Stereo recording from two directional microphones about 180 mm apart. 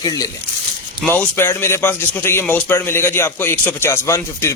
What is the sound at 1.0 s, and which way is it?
A man's voice, 10° left (ahead or behind).